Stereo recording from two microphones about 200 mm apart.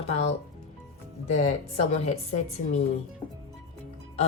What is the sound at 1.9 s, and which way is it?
Speech, 35° left (ahead or behind).